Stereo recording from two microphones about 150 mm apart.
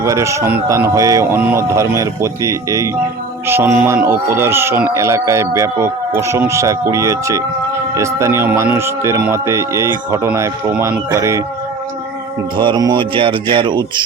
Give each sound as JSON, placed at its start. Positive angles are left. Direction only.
{"t": 0.0, "sound": "speech", "side_deg": -20}
{"t": 12.5, "sound": "speech", "side_deg": -30}